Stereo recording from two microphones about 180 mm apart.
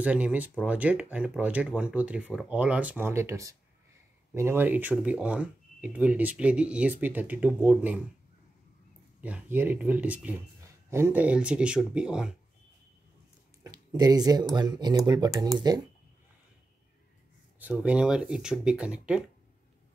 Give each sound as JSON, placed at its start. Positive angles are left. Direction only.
{"t": 0.0, "sound": "speech", "side_deg": -10}
{"t": 9.2, "sound": "speech", "side_deg": -10}
{"t": 13.7, "sound": "speech", "side_deg": -20}
{"t": 17.6, "sound": "speech", "side_deg": -10}